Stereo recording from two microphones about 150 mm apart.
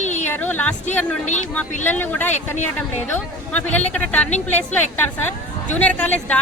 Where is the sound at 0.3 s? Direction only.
10° left (ahead or behind).